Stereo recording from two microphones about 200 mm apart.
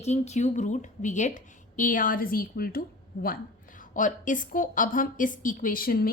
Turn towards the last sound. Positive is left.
turn(degrees=50)  # may be behind; listen again after turning